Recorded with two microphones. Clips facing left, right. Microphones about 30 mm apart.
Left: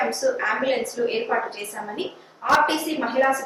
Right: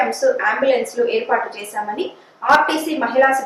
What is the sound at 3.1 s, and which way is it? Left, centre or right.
Speech, centre.